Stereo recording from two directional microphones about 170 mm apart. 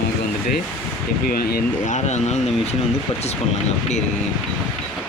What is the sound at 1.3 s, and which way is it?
Speech, 60° left (ahead or behind).